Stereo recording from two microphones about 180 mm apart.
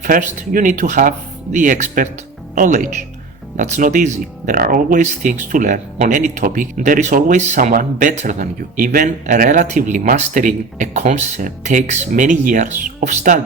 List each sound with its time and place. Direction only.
0.0 s speech: 50° right (ahead or behind)